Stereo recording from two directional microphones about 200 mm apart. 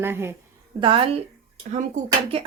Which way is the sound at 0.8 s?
25° right (ahead or behind).